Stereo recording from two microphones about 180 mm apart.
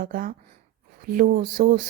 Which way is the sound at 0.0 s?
50° right (ahead or behind).